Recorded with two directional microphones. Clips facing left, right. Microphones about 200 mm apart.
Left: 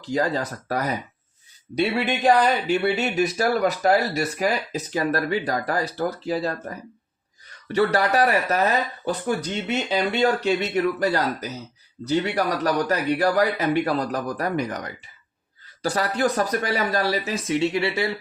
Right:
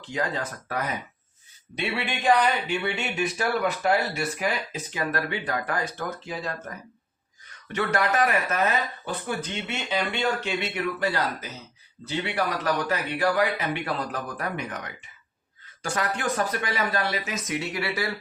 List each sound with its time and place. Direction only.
0.0 s speech: 35° left (ahead or behind)